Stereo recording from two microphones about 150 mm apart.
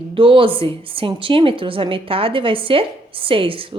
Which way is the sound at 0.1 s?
35° right (ahead or behind).